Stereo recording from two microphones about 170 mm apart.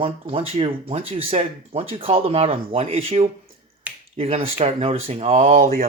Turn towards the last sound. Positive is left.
turn(degrees=-35)  # may be behind; listen again after turning